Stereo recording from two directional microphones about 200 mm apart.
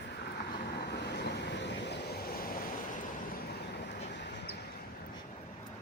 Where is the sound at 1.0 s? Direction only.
55° left (ahead or behind).